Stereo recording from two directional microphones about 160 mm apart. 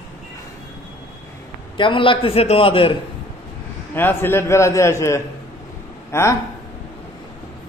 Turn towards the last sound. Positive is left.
turn(degrees=15)  # may be behind; listen again after turning